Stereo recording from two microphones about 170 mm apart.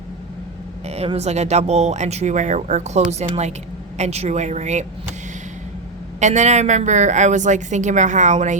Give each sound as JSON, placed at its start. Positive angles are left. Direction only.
{"t": 0.9, "sound": "speech", "side_deg": -40}
{"t": 6.1, "sound": "a woman's voice", "side_deg": -45}